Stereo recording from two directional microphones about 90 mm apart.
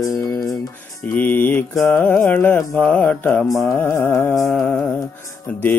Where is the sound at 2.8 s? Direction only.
10° left (ahead or behind).